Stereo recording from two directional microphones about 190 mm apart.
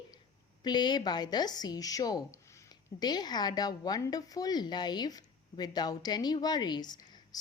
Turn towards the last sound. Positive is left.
turn(degrees=20)  # may be behind; listen again after turning